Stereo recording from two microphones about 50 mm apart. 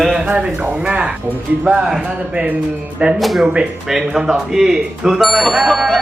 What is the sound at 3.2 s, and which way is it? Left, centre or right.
Speech, centre.